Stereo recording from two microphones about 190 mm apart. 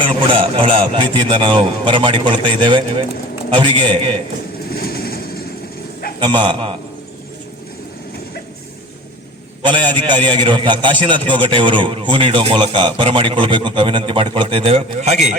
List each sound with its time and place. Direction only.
0.0 s a man's voice: 25° right (ahead or behind)
4.7 s vehicle: 50° left (ahead or behind)
6.1 s a man's voice: 25° right (ahead or behind)
9.6 s a man's voice: 25° right (ahead or behind)